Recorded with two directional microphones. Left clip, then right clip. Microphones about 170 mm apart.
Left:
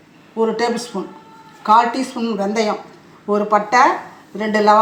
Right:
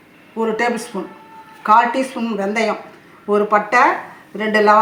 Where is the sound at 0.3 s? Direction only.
Centre (ahead or behind).